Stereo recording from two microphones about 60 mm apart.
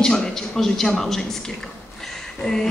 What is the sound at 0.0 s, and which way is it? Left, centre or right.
A man's voice, centre.